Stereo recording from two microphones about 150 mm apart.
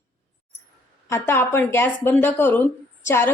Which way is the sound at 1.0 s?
20° left (ahead or behind).